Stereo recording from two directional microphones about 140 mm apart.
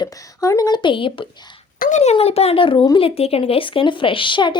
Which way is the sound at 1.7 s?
90° left.